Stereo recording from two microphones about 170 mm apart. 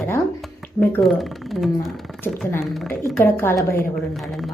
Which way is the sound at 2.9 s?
10° left (ahead or behind).